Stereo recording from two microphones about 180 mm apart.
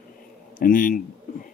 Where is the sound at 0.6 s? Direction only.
50° left (ahead or behind).